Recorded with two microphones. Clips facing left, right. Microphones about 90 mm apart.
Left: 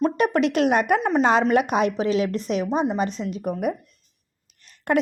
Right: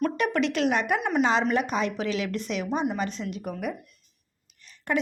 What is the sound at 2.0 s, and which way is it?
A woman's voice, 35° left (ahead or behind).